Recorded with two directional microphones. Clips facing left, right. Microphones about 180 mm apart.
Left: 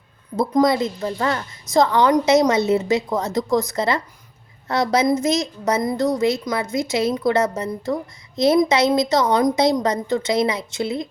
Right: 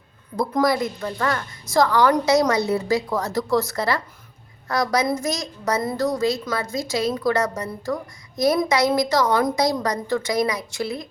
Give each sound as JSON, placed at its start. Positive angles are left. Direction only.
{"t": 0.3, "sound": "a woman's voice", "side_deg": 25}